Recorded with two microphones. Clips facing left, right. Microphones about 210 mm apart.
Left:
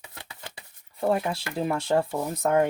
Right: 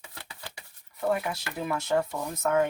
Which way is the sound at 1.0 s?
30° left (ahead or behind).